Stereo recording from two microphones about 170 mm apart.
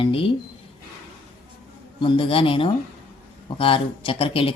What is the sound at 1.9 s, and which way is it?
Speech, 30° left (ahead or behind).